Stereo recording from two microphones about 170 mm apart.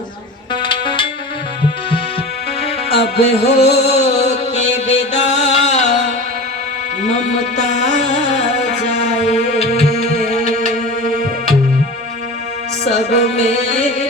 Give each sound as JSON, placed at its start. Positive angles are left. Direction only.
{"t": 0.5, "sound": "music", "side_deg": 30}
{"t": 2.9, "sound": "music", "side_deg": 35}
{"t": 9.9, "sound": "music", "side_deg": -60}
{"t": 10.5, "sound": "music", "side_deg": 40}
{"t": 12.8, "sound": "music", "side_deg": 40}